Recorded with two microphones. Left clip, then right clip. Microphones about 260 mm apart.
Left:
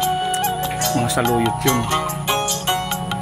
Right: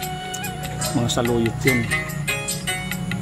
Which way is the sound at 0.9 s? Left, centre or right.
Left.